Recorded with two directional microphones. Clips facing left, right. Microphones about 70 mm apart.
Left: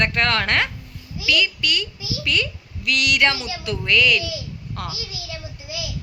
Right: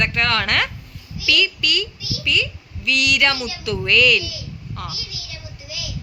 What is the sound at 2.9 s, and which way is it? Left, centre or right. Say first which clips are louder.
A woman's voice: even; left.